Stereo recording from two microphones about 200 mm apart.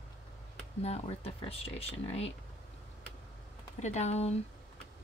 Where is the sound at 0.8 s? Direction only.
30° left (ahead or behind).